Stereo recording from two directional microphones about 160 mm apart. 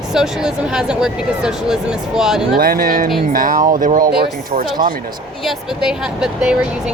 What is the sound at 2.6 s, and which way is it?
Speech, 65° right (ahead or behind).